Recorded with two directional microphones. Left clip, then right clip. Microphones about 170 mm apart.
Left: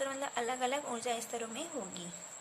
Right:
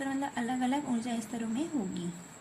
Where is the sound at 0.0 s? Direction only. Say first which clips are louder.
Right 1 dB; 20° left (ahead or behind).